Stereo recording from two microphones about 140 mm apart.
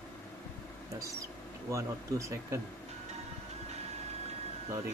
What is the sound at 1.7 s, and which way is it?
Speech, 20° right (ahead or behind).